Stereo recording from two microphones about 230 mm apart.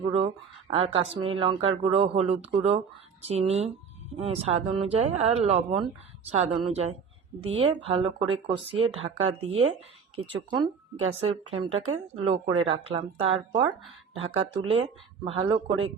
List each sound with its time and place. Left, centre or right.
0.1 s speech: right